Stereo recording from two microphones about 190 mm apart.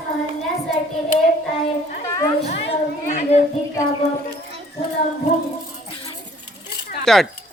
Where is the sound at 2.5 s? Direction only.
35° left (ahead or behind).